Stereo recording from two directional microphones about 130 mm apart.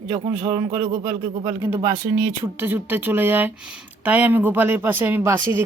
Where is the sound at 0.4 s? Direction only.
25° right (ahead or behind).